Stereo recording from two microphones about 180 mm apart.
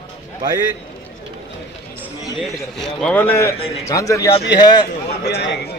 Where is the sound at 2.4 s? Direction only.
Centre (ahead or behind); by 4.9 s 25° left (ahead or behind).